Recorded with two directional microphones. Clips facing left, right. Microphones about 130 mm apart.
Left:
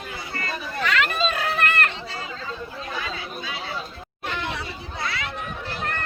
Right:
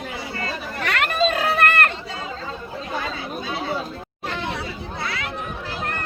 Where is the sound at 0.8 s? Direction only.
55° right (ahead or behind).